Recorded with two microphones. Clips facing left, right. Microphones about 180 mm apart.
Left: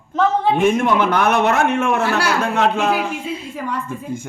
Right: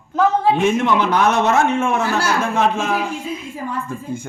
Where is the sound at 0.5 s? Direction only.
50° left (ahead or behind); by 3.0 s 70° left (ahead or behind).